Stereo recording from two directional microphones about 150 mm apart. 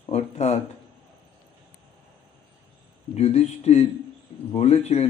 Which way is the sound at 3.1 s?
45° left (ahead or behind).